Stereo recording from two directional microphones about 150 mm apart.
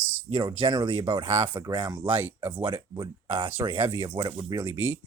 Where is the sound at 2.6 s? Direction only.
30° right (ahead or behind).